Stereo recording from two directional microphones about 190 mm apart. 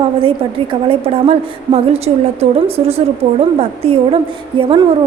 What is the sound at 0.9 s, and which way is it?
A woman's voice, 30° right (ahead or behind).